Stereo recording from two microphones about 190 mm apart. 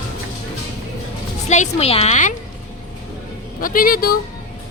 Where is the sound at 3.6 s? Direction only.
50° left (ahead or behind).